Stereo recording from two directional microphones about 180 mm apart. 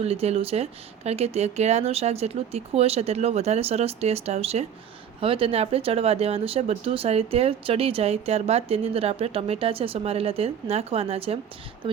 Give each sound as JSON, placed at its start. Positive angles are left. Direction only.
{"t": 0.0, "sound": "speech", "side_deg": -35}